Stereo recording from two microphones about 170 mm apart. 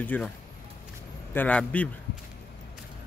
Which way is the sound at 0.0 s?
10° left (ahead or behind).